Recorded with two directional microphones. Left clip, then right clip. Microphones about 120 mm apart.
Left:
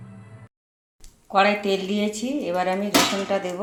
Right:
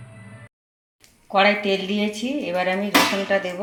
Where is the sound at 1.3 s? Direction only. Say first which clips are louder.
Right 1 dB; 5° left (ahead or behind).